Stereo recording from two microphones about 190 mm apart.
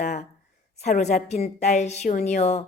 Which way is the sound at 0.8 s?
35° left (ahead or behind).